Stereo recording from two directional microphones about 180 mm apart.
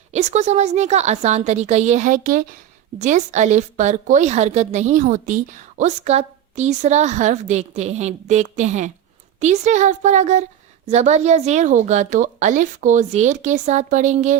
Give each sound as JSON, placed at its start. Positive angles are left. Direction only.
{"t": 0.1, "sound": "a woman's voice", "side_deg": -40}